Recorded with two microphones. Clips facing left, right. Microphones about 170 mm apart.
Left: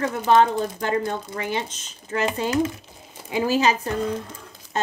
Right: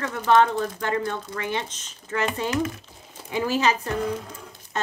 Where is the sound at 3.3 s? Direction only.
10° left (ahead or behind).